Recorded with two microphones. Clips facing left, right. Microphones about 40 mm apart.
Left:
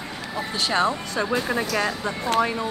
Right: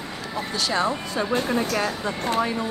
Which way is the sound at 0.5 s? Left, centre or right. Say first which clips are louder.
Left 1 dB; left.